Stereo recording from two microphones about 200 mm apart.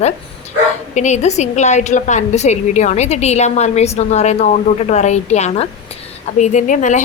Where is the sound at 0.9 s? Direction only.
35° left (ahead or behind).